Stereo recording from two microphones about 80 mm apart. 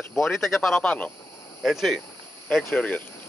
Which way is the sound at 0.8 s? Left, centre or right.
Centre.